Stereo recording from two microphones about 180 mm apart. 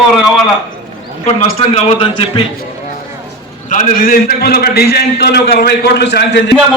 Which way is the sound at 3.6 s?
45° left (ahead or behind).